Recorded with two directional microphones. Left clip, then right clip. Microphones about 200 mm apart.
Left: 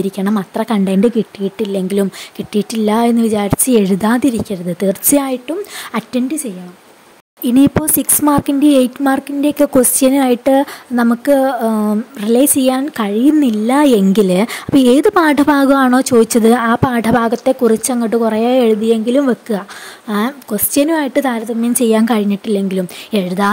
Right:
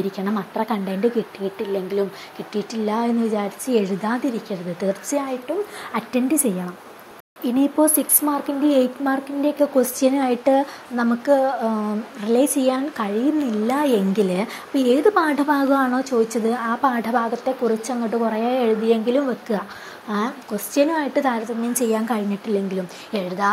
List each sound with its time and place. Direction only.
0.1 s speech: 40° left (ahead or behind)
5.5 s speech: 60° left (ahead or behind)
5.9 s a woman's voice: 40° left (ahead or behind)
6.5 s speech: 5° left (ahead or behind)
7.4 s speech: 50° left (ahead or behind)